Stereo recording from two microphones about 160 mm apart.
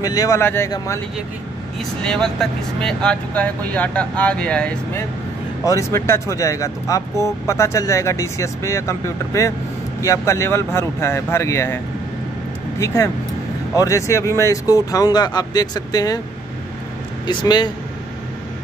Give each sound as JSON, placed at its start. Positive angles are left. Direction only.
{"t": 0.0, "sound": "speech", "side_deg": 20}
{"t": 2.0, "sound": "speech", "side_deg": 5}
{"t": 5.6, "sound": "speech", "side_deg": 20}
{"t": 17.3, "sound": "speech", "side_deg": 30}